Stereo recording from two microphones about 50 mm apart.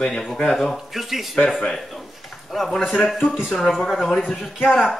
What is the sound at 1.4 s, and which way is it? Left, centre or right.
Speech, centre.